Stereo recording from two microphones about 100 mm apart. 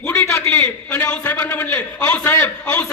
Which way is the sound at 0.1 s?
30° left (ahead or behind).